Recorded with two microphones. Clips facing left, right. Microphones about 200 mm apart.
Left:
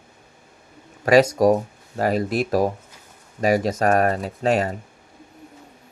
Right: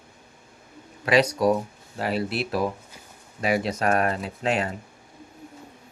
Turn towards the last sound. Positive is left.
turn(degrees=40)  # may be behind; listen again after turning